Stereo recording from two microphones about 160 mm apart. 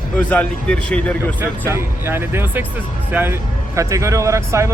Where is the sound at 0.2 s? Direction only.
10° left (ahead or behind).